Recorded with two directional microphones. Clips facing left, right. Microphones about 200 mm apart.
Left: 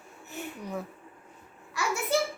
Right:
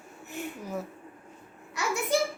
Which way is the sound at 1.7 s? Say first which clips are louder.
Right 1 dB; 15° right (ahead or behind).